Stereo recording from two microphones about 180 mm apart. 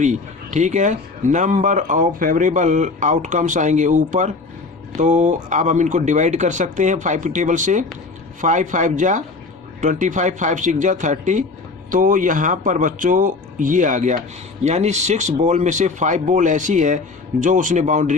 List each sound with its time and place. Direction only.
0.0 s speech: 40° right (ahead or behind)